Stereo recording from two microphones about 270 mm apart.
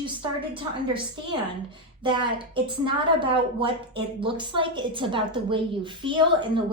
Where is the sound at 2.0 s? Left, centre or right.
Centre.